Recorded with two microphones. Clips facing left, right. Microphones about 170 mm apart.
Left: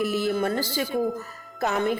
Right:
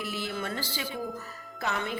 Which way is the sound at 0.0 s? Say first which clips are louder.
Left 10 dB; 45° left (ahead or behind).